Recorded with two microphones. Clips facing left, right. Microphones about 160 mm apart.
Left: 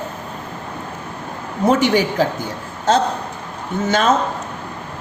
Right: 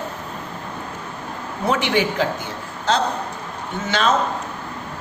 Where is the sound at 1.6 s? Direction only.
45° left (ahead or behind).